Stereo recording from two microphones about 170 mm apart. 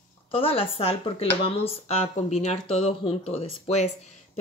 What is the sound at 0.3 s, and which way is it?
Cutlery, 35° left (ahead or behind).